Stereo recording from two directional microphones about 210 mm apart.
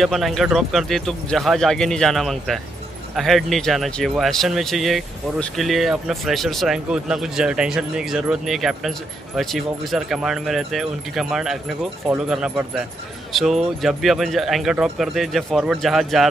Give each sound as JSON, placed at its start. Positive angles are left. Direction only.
{"t": 0.0, "sound": "speech", "side_deg": 0}